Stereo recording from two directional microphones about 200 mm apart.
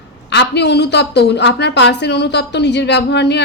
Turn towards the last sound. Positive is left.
turn(degrees=60)  # may be behind; listen again after turning